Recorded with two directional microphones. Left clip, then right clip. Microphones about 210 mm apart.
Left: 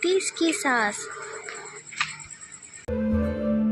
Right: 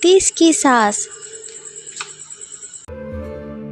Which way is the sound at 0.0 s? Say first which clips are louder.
Right 11 dB; 50° right (ahead or behind).